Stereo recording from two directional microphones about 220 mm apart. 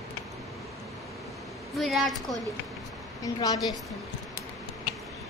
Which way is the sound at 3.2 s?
15° left (ahead or behind).